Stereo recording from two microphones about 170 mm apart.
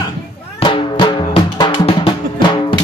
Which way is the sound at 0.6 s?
30° left (ahead or behind).